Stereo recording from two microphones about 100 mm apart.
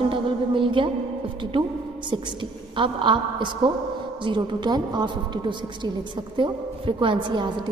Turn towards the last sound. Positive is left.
turn(degrees=-50)  # may be behind; listen again after turning